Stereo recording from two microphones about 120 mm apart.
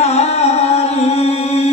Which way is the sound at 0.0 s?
60° left (ahead or behind).